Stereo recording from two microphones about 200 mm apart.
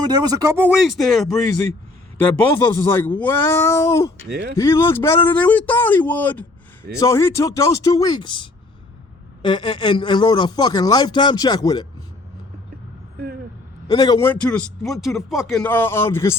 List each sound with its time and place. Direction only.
0.1 s speech: 20° right (ahead or behind)
0.8 s speech: centre (ahead or behind)
2.6 s a man's voice: 15° left (ahead or behind)
4.3 s speech: 55° right (ahead or behind)
4.5 s a man's voice: 15° left (ahead or behind)
13.8 s a man's voice: 20° left (ahead or behind)